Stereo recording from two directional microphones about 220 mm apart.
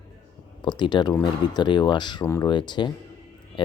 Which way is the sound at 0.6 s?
20° left (ahead or behind).